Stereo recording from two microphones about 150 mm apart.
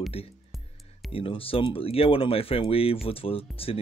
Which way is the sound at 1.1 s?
40° left (ahead or behind).